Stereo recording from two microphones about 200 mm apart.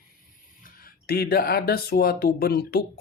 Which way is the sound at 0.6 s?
45° left (ahead or behind).